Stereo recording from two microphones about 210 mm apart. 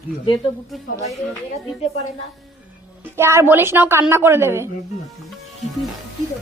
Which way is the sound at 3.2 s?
10° right (ahead or behind).